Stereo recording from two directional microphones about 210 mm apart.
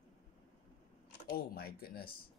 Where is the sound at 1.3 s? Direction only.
45° left (ahead or behind).